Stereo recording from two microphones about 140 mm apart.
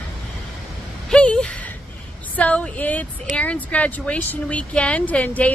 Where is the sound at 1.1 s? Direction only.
5° left (ahead or behind).